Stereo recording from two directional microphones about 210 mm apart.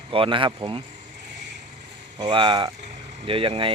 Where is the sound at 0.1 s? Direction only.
25° right (ahead or behind).